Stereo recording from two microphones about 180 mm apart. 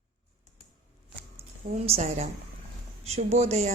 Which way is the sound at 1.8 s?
35° right (ahead or behind).